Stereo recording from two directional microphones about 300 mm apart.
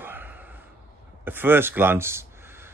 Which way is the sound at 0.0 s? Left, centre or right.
Centre.